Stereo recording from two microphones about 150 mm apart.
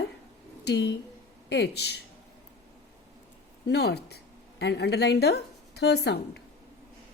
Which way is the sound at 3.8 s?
90° left.